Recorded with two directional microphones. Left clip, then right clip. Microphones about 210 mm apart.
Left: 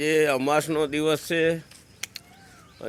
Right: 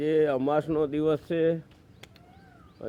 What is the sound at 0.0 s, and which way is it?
Speech, 10° left (ahead or behind).